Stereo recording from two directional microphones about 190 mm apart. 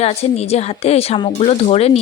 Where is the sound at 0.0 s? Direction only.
35° left (ahead or behind).